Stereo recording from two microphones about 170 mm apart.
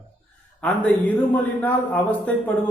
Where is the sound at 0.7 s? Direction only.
5° left (ahead or behind).